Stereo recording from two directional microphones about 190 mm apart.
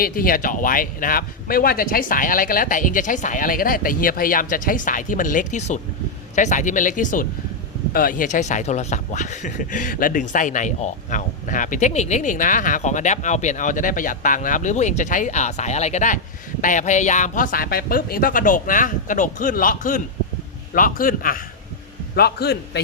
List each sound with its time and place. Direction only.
0.0 s a man's voice: 50° left (ahead or behind)